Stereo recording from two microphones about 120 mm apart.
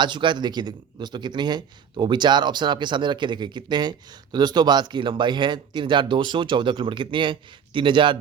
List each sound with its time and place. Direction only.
0.0 s a man's voice: 40° right (ahead or behind)